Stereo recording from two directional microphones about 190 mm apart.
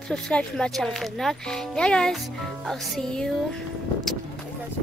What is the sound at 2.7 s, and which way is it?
Music, centre (ahead or behind).